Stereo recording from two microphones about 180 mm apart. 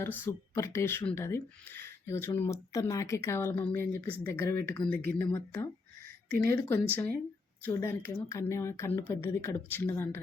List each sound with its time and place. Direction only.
0.0 s speech: 15° left (ahead or behind)